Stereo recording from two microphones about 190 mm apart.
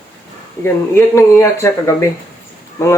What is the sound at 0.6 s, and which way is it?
Speech, 15° left (ahead or behind).